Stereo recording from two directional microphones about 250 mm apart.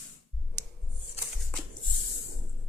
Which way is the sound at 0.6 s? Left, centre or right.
Right.